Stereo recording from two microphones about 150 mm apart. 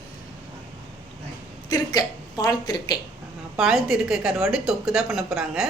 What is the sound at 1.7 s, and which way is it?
A woman's voice, 25° left (ahead or behind).